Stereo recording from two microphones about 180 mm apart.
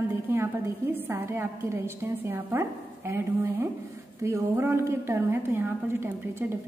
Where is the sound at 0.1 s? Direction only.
15° right (ahead or behind).